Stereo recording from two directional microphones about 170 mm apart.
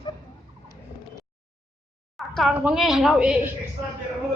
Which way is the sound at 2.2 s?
Centre (ahead or behind).